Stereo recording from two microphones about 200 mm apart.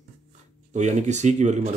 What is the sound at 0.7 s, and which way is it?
Speech, 35° right (ahead or behind).